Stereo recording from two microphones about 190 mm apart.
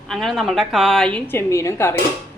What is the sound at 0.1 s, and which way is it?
A woman's voice, centre (ahead or behind).